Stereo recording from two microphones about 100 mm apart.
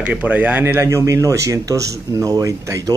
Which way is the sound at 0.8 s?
30° right (ahead or behind).